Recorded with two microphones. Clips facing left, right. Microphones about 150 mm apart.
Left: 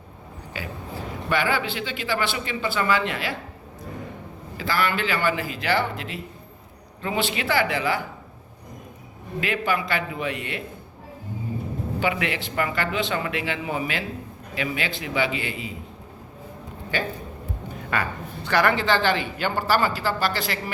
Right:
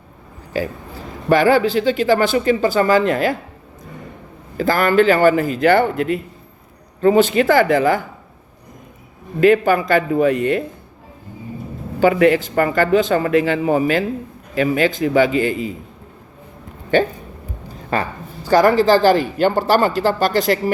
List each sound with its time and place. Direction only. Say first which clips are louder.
0.5 s speech: right 10 dB; 40° right (ahead or behind)
4.5 s a man's voice: right 11 dB; 45° right (ahead or behind)
9.4 s a man's voice: right 12 dB; 45° right (ahead or behind)
11.9 s a man's voice: right 13 dB; 45° right (ahead or behind)
17.7 s a man's voice: right 6 dB; 30° right (ahead or behind)